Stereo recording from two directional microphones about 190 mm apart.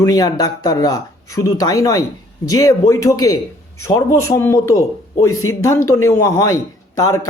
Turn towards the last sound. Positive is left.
turn(degrees=15)  # may be behind; listen again after turning